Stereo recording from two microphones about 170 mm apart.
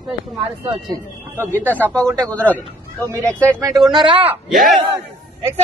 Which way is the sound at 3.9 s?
30° right (ahead or behind).